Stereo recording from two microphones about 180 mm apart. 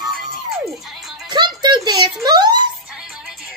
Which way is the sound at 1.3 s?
25° right (ahead or behind).